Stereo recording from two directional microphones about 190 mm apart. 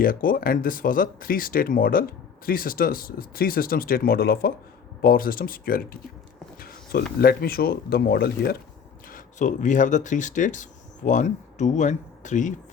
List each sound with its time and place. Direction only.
0.0 s speech: 45° left (ahead or behind)
6.6 s a sound: 50° left (ahead or behind)
7.2 s speech: 55° left (ahead or behind)
9.1 s speech: 40° left (ahead or behind)